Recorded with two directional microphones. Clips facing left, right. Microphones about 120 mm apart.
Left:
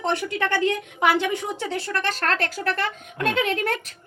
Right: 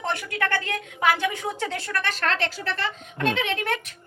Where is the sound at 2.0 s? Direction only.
45° left (ahead or behind).